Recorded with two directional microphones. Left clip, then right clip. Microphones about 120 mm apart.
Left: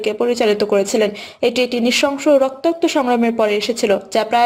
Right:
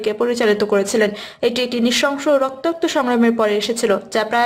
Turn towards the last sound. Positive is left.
turn(degrees=25)  # may be behind; listen again after turning